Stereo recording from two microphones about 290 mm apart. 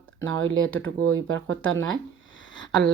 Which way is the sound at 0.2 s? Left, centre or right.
Right.